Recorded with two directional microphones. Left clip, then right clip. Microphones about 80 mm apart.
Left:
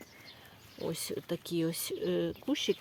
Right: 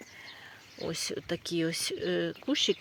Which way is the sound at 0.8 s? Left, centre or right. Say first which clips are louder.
Right 2 dB; left.